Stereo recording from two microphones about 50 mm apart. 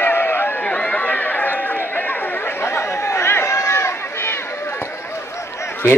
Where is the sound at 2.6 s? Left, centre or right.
Left.